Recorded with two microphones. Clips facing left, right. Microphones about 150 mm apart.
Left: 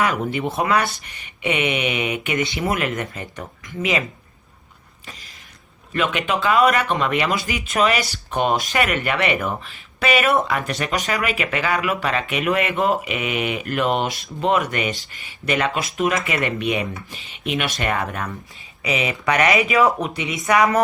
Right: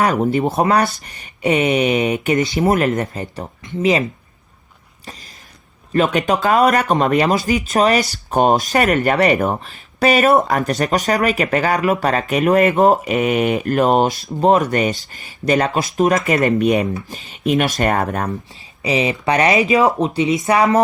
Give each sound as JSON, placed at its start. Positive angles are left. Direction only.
{"t": 0.0, "sound": "speech", "side_deg": -40}
{"t": 5.9, "sound": "speech", "side_deg": -40}
{"t": 18.8, "sound": "speech", "side_deg": -30}